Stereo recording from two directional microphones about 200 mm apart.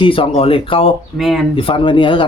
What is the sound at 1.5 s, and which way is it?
Speech, 25° left (ahead or behind).